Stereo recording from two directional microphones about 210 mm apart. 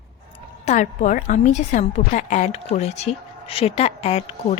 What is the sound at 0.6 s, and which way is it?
A woman's voice, 35° left (ahead or behind).